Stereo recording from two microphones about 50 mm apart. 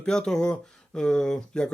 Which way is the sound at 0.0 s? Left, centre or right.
Centre.